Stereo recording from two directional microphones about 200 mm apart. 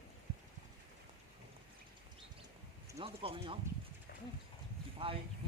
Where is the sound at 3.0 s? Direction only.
25° right (ahead or behind).